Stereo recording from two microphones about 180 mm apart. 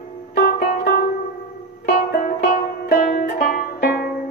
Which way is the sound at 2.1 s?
55° left (ahead or behind).